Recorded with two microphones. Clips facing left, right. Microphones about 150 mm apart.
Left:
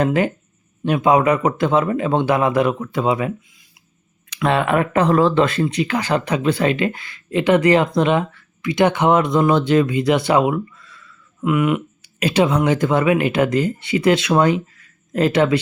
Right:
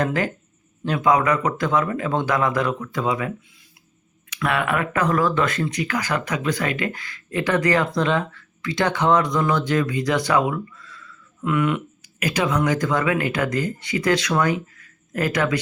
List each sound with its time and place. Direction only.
0.0 s speech: 20° left (ahead or behind)
4.4 s speech: 30° left (ahead or behind); by 11.8 s 15° left (ahead or behind)
12.2 s speech: 30° left (ahead or behind)